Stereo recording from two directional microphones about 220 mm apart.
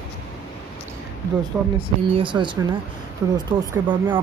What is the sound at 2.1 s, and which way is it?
Speech, 20° right (ahead or behind).